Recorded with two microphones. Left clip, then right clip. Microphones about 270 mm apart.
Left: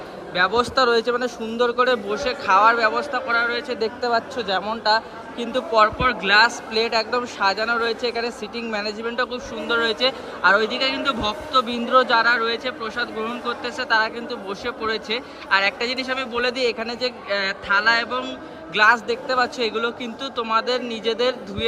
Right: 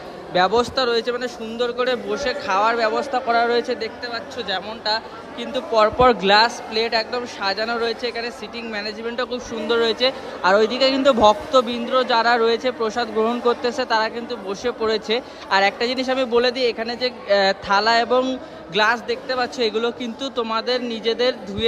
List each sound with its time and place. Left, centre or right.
0.3 s a man's voice: centre